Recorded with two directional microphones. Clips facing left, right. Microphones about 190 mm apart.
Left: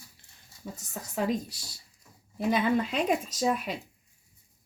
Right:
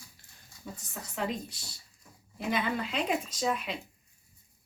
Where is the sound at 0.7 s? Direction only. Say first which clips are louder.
Left 5 dB; 40° left (ahead or behind).